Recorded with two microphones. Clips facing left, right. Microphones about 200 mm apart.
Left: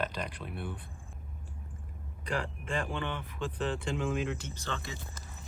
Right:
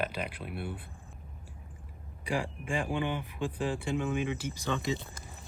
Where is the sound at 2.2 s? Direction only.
10° right (ahead or behind).